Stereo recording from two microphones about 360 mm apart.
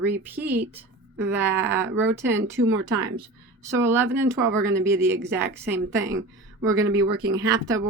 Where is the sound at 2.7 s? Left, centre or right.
Right.